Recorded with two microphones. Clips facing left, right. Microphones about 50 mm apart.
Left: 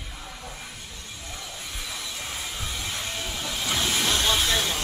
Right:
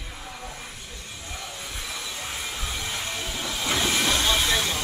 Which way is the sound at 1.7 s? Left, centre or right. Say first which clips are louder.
Even; centre.